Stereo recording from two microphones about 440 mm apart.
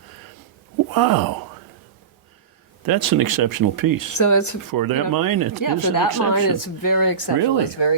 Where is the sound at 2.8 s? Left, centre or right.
Right.